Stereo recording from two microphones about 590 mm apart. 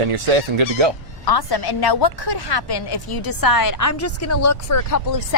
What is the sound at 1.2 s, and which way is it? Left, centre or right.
A woman's voice, left.